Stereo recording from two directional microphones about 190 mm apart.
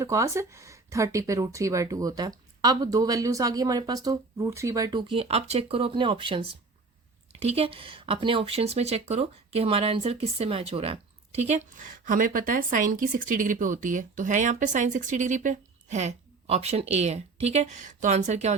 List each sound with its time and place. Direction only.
0.0 s speech: 15° right (ahead or behind); by 18.5 s 35° right (ahead or behind)